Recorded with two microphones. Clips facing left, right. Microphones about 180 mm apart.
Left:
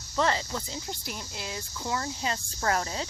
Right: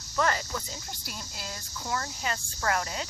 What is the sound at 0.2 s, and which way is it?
Speech, 25° left (ahead or behind).